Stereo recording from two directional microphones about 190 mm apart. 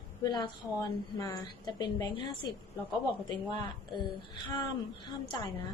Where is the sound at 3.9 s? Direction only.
25° left (ahead or behind).